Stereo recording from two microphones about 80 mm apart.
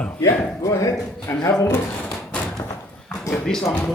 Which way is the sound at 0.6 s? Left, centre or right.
Left.